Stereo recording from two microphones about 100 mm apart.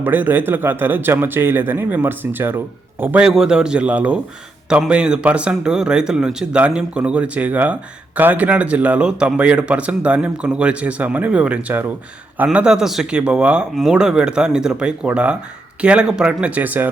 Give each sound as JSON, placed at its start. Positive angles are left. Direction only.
{"t": 0.0, "sound": "a man's voice", "side_deg": -20}
{"t": 12.5, "sound": "a man's voice", "side_deg": -5}